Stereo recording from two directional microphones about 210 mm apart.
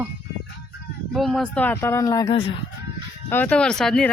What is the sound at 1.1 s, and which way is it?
Speech, centre (ahead or behind).